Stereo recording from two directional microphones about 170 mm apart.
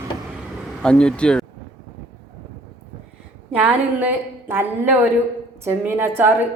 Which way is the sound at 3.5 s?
10° right (ahead or behind).